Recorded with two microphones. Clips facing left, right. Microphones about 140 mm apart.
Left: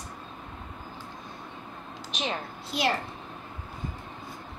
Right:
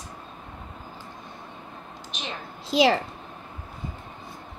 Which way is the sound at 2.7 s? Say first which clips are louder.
Right 8 dB; 90° right.